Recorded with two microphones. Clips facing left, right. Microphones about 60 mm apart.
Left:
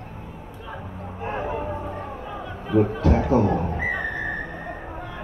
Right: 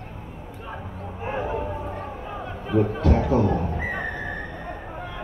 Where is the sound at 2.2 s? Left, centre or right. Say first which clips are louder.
Even; right.